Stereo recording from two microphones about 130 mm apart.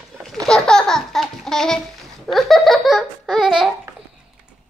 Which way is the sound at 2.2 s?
Centre (ahead or behind).